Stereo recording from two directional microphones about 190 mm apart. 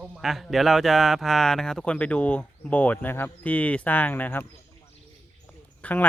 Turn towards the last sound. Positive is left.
turn(degrees=10)  # may be behind; listen again after turning